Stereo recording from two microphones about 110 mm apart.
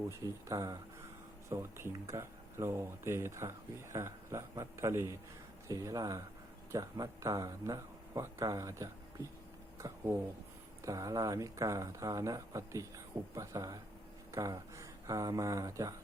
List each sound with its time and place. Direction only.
0.1 s speech: 30° right (ahead or behind)